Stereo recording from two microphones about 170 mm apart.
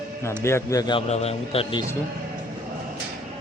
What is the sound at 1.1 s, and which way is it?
Speech, 40° left (ahead or behind).